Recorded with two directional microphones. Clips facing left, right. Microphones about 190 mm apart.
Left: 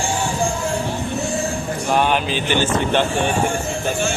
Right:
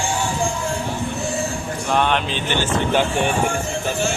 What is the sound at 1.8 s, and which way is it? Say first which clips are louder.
Mantra: left 1 dB; 5° left (ahead or behind).